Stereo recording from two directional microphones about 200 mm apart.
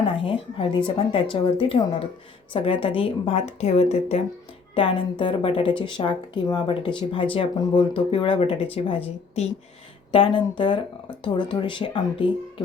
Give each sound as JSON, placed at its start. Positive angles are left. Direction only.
{"t": 0.1, "sound": "a woman's voice", "side_deg": 25}